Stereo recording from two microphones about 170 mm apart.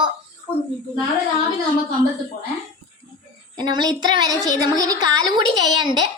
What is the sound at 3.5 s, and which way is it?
A woman's voice, 25° right (ahead or behind).